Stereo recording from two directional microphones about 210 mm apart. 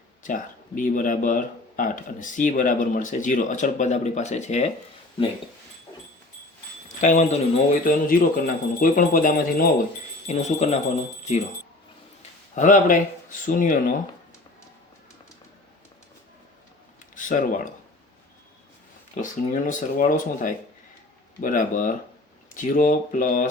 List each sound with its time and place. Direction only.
0.2 s speech: 40° left (ahead or behind)
6.8 s speech: 35° left (ahead or behind)
12.5 s speech: 35° left (ahead or behind)
17.2 s speech: 40° left (ahead or behind)
19.1 s speech: 40° left (ahead or behind)